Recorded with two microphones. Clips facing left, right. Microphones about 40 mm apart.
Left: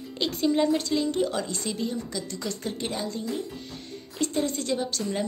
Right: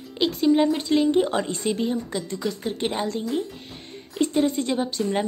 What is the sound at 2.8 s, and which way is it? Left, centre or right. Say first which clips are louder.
Speech: right 7 dB; right.